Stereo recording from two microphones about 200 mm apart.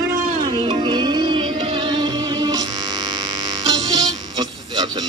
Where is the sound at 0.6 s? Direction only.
20° right (ahead or behind).